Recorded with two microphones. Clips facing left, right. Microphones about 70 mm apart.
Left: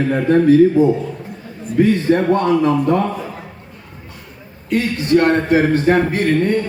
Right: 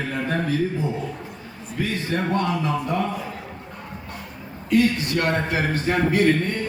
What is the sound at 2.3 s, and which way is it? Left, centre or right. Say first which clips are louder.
Speech: left 8 dB; left.